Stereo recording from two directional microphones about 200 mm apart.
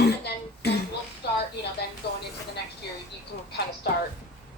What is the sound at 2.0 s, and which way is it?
Vehicle, 55° left (ahead or behind).